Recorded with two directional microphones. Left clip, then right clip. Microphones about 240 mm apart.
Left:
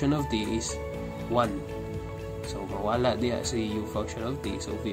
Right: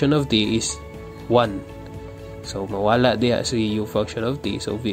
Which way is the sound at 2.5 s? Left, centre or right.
Right.